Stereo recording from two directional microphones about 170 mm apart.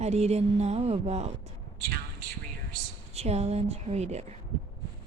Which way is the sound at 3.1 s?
40° right (ahead or behind).